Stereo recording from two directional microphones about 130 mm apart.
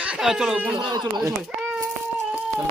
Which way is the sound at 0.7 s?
35° right (ahead or behind).